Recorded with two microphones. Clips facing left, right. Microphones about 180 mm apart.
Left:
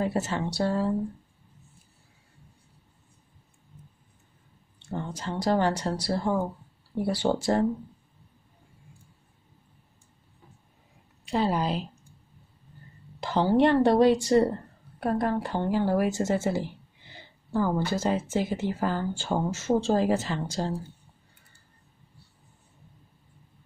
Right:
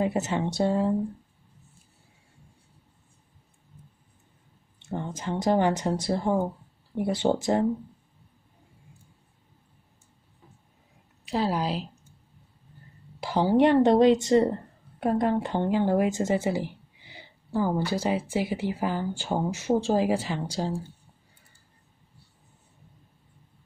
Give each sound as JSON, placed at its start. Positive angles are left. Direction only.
{"t": 0.0, "sound": "speech", "side_deg": -20}
{"t": 4.7, "sound": "speech", "side_deg": -20}
{"t": 11.2, "sound": "a woman's voice", "side_deg": 0}
{"t": 13.2, "sound": "speech", "side_deg": -10}